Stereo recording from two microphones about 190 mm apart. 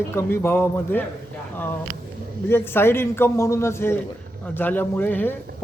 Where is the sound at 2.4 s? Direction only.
10° left (ahead or behind).